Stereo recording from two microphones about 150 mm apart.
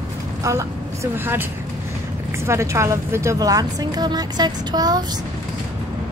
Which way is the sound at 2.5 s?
20° right (ahead or behind).